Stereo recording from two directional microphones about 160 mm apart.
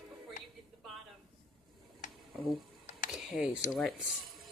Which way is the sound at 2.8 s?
55° left (ahead or behind).